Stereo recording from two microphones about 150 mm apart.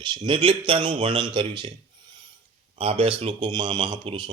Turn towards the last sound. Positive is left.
turn(degrees=-35)  # may be behind; listen again after turning